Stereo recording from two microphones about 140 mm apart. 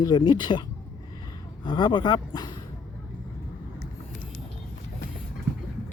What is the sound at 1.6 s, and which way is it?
Speech, 35° left (ahead or behind).